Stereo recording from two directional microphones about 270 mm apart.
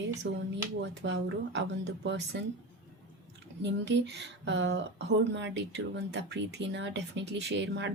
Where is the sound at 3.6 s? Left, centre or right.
Right.